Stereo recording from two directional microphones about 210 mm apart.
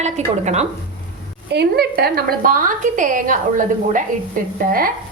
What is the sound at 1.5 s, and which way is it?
A woman's voice, 50° right (ahead or behind).